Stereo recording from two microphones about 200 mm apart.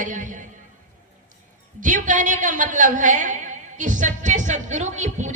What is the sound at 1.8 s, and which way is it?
A woman's voice, 40° right (ahead or behind).